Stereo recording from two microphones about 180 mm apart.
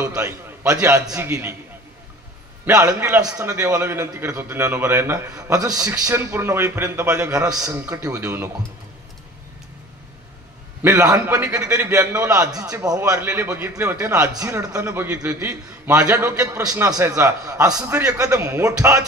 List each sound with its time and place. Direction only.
0.0 s a man's voice: 15° right (ahead or behind)
2.6 s a man's voice: 15° right (ahead or behind)
10.8 s a man's voice: 15° right (ahead or behind)